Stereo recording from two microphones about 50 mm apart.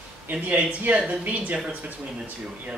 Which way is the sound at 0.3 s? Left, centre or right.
Right.